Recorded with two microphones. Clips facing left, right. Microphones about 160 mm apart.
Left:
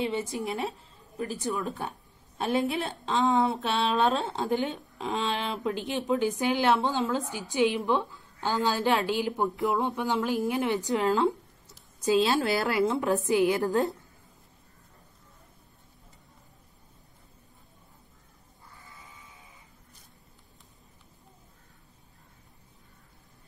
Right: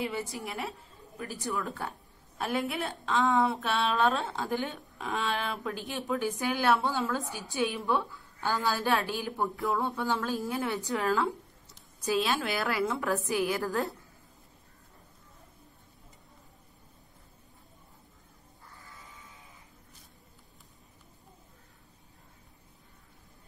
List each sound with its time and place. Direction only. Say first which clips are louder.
0.0 s a woman's voice: left 4 dB; 20° left (ahead or behind)
12.4 s a woman's voice: left 5 dB; 35° left (ahead or behind)
12.8 s a woman's voice: left 4 dB; 20° left (ahead or behind)